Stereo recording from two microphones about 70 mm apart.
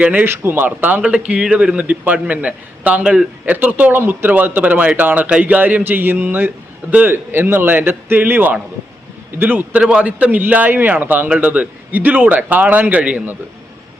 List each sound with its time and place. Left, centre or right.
0.0 s a man's voice: right
1.0 s a man's voice: centre